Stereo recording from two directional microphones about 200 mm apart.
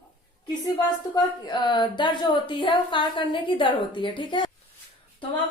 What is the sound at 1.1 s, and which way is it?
A woman's voice, 20° left (ahead or behind).